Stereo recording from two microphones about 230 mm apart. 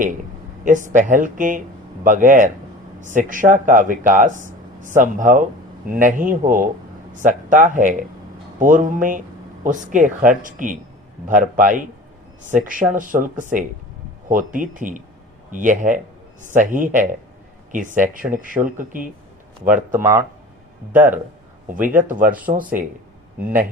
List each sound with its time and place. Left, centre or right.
0.6 s speech: right
19.6 s speech: centre
21.7 s speech: right